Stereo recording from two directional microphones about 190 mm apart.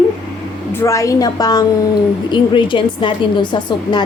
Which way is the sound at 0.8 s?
15° left (ahead or behind).